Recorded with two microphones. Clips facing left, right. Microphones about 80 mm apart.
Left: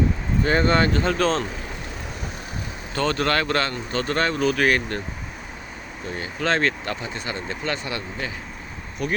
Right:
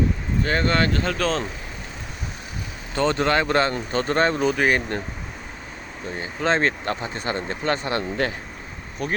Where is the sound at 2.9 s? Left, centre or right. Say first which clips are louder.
Right 2 dB; right.